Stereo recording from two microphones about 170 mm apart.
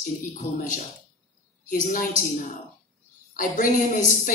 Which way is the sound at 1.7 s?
50° left (ahead or behind).